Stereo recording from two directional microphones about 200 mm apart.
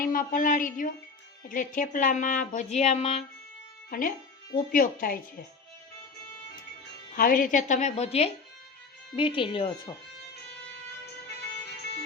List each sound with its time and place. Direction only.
0.0 s speech: 45° left (ahead or behind)
3.8 s speech: 45° left (ahead or behind)
7.2 s speech: 45° left (ahead or behind); by 9.9 s 25° left (ahead or behind)